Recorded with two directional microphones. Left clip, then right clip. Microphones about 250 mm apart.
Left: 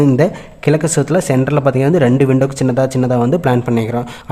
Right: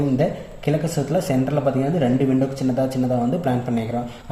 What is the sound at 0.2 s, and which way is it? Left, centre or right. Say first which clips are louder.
Speech: left 7 dB; left.